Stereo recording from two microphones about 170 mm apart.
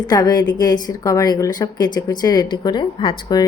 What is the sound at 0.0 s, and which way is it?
A woman's voice, 25° left (ahead or behind).